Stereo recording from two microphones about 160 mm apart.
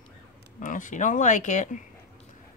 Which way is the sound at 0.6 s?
55° left (ahead or behind).